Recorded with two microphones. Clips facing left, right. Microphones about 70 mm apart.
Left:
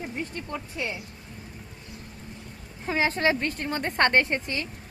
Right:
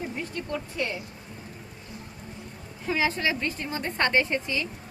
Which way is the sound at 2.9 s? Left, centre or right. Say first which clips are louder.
Left 2 dB; left.